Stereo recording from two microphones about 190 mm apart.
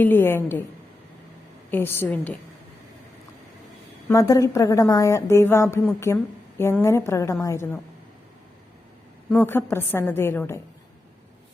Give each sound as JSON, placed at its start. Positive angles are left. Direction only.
{"t": 0.0, "sound": "a woman's voice", "side_deg": 10}
{"t": 1.7, "sound": "a woman's voice", "side_deg": 10}
{"t": 4.1, "sound": "a woman's voice", "side_deg": 15}
{"t": 9.3, "sound": "a woman's voice", "side_deg": 10}